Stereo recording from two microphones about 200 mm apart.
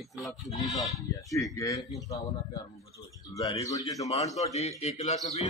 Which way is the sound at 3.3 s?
15° left (ahead or behind).